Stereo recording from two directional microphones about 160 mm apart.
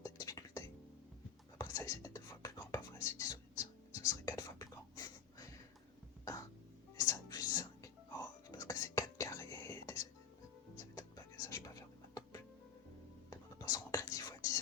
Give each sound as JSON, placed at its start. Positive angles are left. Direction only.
{"t": 0.0, "sound": "music", "side_deg": 20}
{"t": 1.5, "sound": "whispering", "side_deg": 20}
{"t": 6.9, "sound": "music", "side_deg": 20}
{"t": 8.4, "sound": "whispering", "side_deg": 20}
{"t": 10.9, "sound": "music", "side_deg": 20}
{"t": 13.3, "sound": "whispering", "side_deg": 20}